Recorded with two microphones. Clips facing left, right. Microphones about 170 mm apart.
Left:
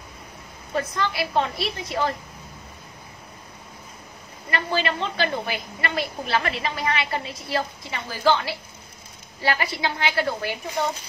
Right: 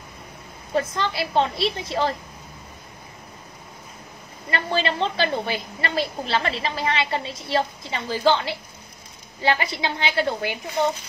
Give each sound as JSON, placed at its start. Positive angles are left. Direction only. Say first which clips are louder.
{"t": 0.7, "sound": "a woman's voice", "louder": "right 2 dB", "side_deg": -25}
{"t": 4.5, "sound": "a woman's voice", "louder": "right 1 dB", "side_deg": -30}